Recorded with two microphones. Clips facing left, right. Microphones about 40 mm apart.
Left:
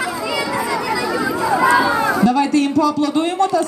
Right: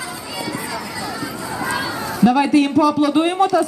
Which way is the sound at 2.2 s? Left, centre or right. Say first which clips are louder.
Right 5 dB; centre.